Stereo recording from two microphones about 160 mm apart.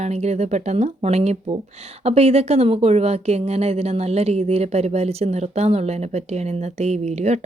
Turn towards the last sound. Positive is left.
turn(degrees=-45)  # may be behind; listen again after turning